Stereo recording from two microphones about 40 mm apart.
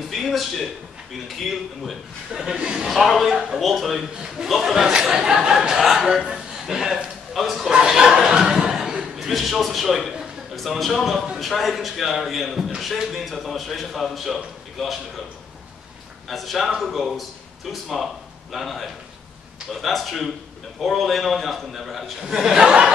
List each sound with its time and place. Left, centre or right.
0.1 s a man's voice: centre
2.4 s a man's voice: centre
2.9 s a man's voice: centre
7.7 s a sound: centre
9.3 s a man's voice: centre
16.3 s a man's voice: centre
22.2 s a man's voice: centre